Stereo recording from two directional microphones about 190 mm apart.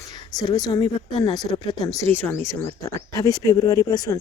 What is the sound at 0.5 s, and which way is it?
Speech, 20° left (ahead or behind).